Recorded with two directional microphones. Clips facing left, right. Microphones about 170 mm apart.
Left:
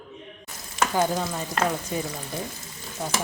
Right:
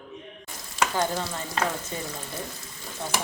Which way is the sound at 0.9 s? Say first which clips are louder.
Left 5 dB; 15° left (ahead or behind).